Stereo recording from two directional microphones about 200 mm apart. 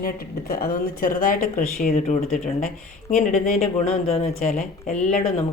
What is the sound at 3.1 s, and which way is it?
Speech, 40° left (ahead or behind).